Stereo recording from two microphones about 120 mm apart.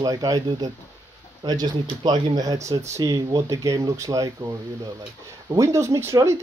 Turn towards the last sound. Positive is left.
turn(degrees=-25)  # may be behind; listen again after turning